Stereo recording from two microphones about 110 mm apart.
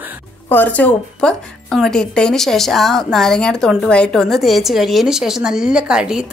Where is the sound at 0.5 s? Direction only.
15° left (ahead or behind).